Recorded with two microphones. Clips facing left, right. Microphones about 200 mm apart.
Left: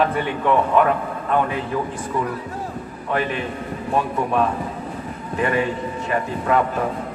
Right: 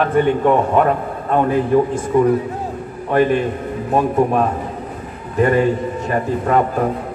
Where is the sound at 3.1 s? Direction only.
45° right (ahead or behind).